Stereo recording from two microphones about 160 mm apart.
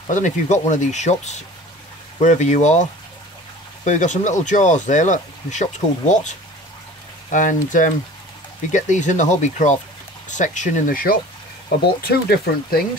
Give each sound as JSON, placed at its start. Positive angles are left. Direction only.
{"t": 0.0, "sound": "speech", "side_deg": 50}
{"t": 12.1, "sound": "speech", "side_deg": 80}